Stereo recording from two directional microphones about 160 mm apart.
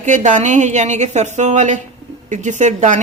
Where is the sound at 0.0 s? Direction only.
50° right (ahead or behind).